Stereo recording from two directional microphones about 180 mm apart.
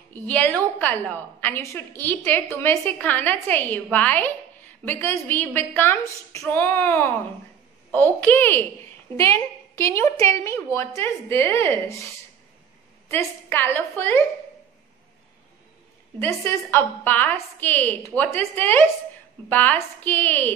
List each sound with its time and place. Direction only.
0.1 s a woman's voice: 10° left (ahead or behind)
13.1 s a woman's voice: 10° left (ahead or behind)
16.2 s a woman's voice: 10° left (ahead or behind)